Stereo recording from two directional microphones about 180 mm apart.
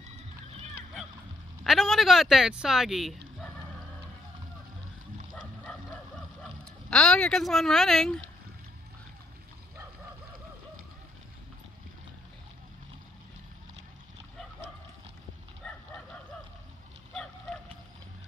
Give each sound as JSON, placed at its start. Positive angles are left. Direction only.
{"t": 1.6, "sound": "speech", "side_deg": 0}
{"t": 5.3, "sound": "bow-wow", "side_deg": 0}
{"t": 6.9, "sound": "speech", "side_deg": 5}
{"t": 15.6, "sound": "bow-wow", "side_deg": 5}
{"t": 17.1, "sound": "a sound", "side_deg": 5}